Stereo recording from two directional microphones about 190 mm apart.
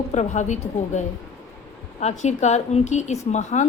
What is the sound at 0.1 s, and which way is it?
A woman's voice, 40° left (ahead or behind).